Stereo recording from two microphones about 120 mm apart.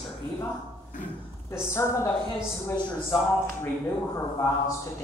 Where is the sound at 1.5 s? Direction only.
20° left (ahead or behind).